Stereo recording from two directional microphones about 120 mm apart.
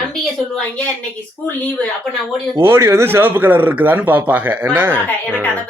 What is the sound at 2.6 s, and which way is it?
A man's voice, 20° right (ahead or behind).